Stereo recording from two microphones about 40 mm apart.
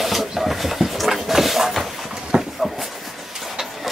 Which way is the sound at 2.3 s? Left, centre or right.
Right.